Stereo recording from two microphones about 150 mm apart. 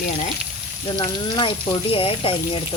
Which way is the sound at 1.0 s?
35° left (ahead or behind).